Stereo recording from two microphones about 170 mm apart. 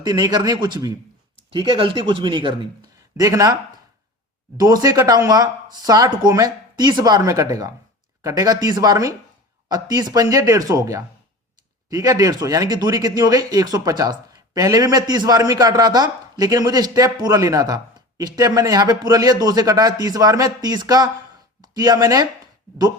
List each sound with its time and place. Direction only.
0.0 s speech: 25° right (ahead or behind)